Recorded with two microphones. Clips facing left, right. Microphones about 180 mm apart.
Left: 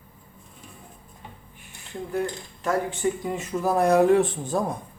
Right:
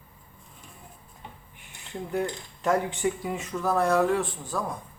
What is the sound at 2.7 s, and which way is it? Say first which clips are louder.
Speech: even; 15° right (ahead or behind).